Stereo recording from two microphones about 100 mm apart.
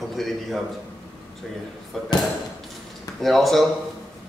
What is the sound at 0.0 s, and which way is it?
Speech, centre (ahead or behind).